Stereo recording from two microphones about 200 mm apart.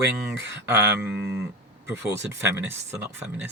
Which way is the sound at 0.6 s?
10° right (ahead or behind).